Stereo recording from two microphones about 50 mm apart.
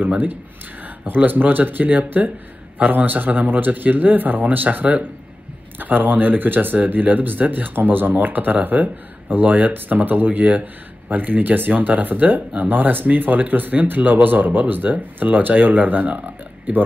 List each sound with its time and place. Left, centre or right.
1.0 s speech: right